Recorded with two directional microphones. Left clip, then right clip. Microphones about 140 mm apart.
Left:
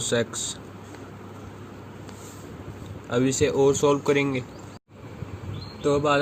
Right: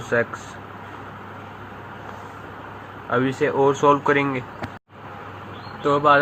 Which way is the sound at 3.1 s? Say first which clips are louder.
Right 2 dB; 50° left (ahead or behind).